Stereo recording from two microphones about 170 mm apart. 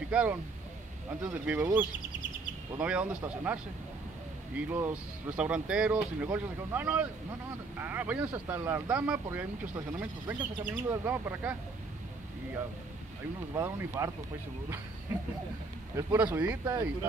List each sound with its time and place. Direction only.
0.1 s speech: 10° right (ahead or behind)
1.4 s speech: 10° right (ahead or behind)
4.6 s speech: 10° right (ahead or behind)
13.6 s speech: 15° right (ahead or behind)
16.1 s speech: 10° right (ahead or behind)